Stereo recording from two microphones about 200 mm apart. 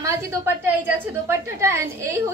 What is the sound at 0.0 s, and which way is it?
A child's voice, 15° right (ahead or behind).